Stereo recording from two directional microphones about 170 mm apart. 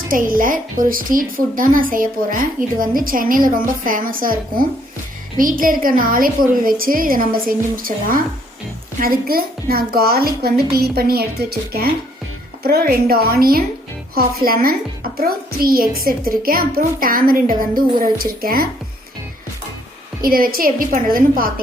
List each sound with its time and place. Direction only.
0.1 s a woman's voice: 55° right (ahead or behind)
20.2 s a woman's voice: 60° right (ahead or behind)